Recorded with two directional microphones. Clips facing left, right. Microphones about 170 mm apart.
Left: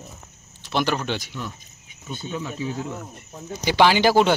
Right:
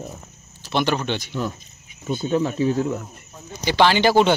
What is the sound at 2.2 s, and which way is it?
Speech, 45° right (ahead or behind).